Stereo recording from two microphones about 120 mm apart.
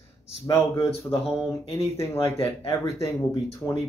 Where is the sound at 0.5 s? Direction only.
30° left (ahead or behind).